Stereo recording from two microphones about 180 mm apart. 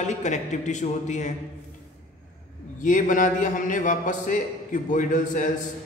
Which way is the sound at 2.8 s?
45° left (ahead or behind).